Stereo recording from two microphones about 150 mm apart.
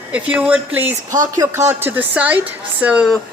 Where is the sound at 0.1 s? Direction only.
10° right (ahead or behind).